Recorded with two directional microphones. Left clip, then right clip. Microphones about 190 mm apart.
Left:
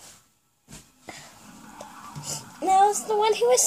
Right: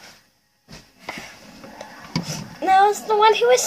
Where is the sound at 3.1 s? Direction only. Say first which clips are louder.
Right 6 dB; 25° left (ahead or behind).